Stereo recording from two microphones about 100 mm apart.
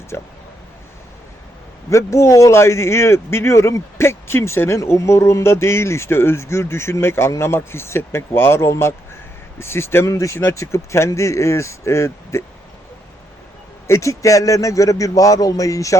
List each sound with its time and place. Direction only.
0.1 s a man's voice: 25° left (ahead or behind)
1.9 s a man's voice: 30° left (ahead or behind)
13.8 s speech: 30° left (ahead or behind)